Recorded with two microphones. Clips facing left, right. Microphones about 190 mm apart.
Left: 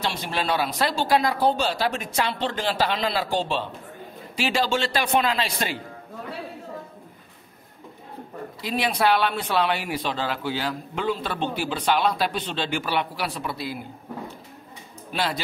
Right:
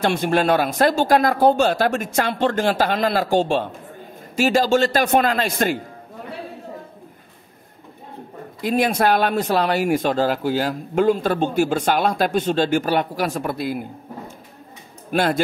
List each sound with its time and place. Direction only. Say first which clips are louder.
0.0 s speech: right 9 dB; 50° right (ahead or behind)
8.5 s speech: right 6 dB; 50° right (ahead or behind)